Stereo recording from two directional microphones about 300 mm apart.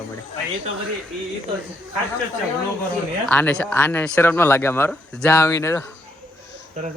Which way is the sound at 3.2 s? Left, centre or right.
Centre.